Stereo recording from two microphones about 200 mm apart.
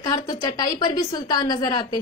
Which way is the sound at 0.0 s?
20° left (ahead or behind).